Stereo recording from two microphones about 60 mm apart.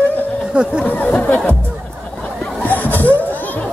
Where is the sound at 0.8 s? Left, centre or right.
Left.